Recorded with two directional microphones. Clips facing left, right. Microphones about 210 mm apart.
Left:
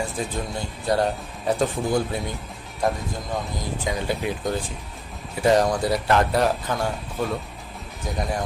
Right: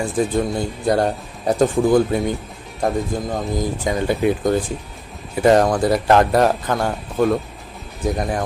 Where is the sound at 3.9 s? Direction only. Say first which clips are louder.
Right 5 dB; 50° right (ahead or behind).